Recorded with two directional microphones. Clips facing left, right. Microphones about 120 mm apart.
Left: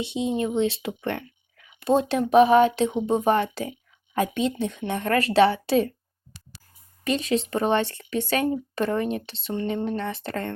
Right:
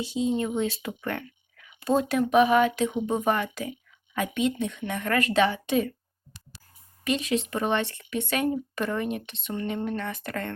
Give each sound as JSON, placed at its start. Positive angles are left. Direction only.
{"t": 0.0, "sound": "speech", "side_deg": 20}
{"t": 7.0, "sound": "speech", "side_deg": 35}